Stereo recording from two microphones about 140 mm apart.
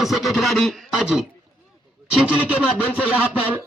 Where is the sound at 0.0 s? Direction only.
Centre (ahead or behind).